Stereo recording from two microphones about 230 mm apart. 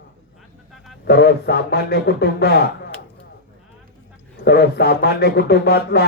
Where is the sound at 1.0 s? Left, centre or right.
Left.